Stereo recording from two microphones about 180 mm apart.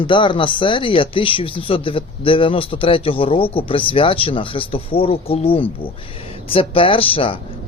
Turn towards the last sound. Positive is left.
turn(degrees=30)  # may be behind; listen again after turning